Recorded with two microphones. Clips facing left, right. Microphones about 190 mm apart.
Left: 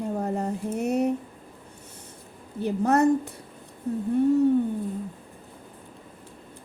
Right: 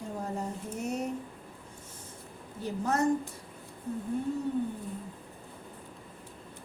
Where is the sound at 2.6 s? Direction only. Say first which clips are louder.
Left 7 dB; 65° left (ahead or behind).